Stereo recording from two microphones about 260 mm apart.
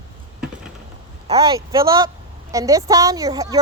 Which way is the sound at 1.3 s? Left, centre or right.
Centre.